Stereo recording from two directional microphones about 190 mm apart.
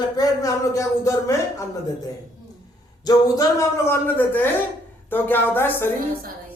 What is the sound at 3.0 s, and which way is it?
Speech, 20° left (ahead or behind).